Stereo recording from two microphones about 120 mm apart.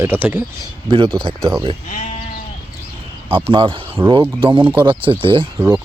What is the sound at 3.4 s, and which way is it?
Speech, 50° right (ahead or behind).